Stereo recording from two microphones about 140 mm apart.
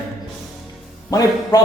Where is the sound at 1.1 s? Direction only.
25° left (ahead or behind).